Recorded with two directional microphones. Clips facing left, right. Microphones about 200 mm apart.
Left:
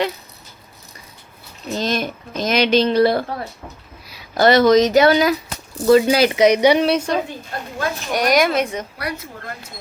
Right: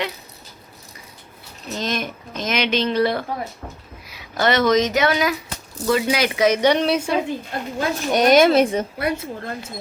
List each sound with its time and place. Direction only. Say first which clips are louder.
1.7 s speech: left 4 dB; 35° left (ahead or behind)
6.4 s a woman's voice: left 2 dB; 15° left (ahead or behind); by 7.2 s 5° right (ahead or behind)
7.8 s a woman's voice: right 3 dB; 25° right (ahead or behind)